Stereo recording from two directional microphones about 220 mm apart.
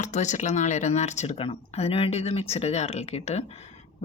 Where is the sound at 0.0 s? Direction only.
30° left (ahead or behind).